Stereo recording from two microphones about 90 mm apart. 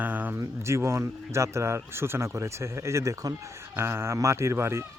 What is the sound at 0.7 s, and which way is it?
Speech, 30° right (ahead or behind).